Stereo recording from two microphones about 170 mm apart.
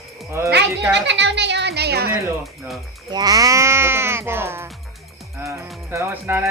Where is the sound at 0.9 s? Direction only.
90° right; by 2.1 s 75° right (ahead or behind).